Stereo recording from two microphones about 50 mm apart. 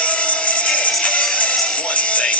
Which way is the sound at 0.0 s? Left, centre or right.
Left.